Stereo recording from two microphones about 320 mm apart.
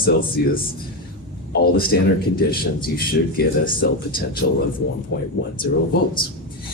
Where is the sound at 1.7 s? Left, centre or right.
Left.